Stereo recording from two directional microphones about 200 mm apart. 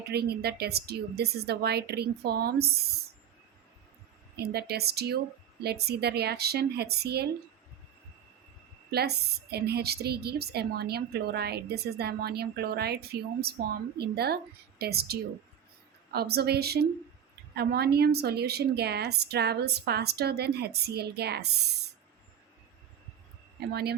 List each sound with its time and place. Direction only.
0.1 s a woman's voice: 55° right (ahead or behind)
4.4 s a woman's voice: 55° right (ahead or behind)
8.9 s a woman's voice: 55° right (ahead or behind)
14.8 s a woman's voice: 50° right (ahead or behind)
23.6 s a woman's voice: 55° right (ahead or behind)